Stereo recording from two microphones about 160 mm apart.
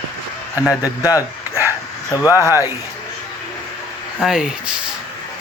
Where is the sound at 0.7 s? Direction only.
20° left (ahead or behind).